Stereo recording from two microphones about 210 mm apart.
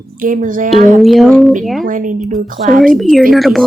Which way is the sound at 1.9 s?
40° right (ahead or behind).